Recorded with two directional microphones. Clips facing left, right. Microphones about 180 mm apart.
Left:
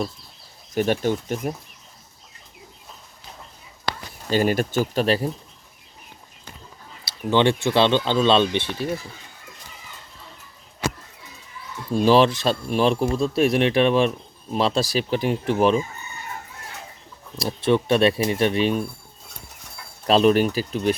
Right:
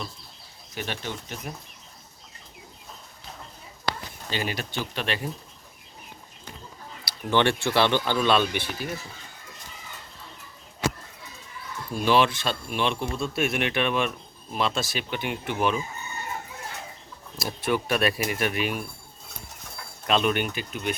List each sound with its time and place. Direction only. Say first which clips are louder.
0.7 s speech: left 12 dB; 45° left (ahead or behind)
4.3 s speech: left 11 dB; 45° left (ahead or behind)
7.0 s speech: left 4 dB; 20° left (ahead or behind)
11.9 s speech: left 6 dB; 35° left (ahead or behind)
17.3 s speech: left 6 dB; 30° left (ahead or behind)
20.1 s speech: left 8 dB; 35° left (ahead or behind)